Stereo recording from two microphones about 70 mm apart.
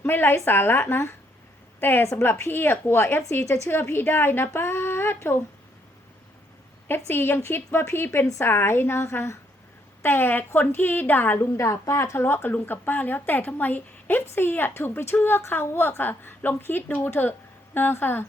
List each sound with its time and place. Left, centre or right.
0.0 s a woman's voice: left
6.8 s a woman's voice: left
10.0 s a woman's voice: left
11.5 s a woman's voice: left